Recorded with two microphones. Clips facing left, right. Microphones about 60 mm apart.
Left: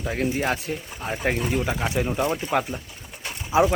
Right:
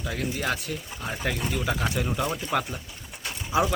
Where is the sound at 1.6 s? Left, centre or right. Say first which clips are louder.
Left 3 dB; centre.